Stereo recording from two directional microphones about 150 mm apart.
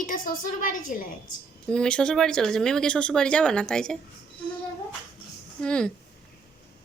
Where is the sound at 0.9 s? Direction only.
60° left (ahead or behind).